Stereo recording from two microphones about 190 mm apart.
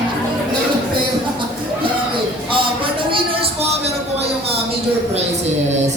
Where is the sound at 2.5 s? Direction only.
25° right (ahead or behind).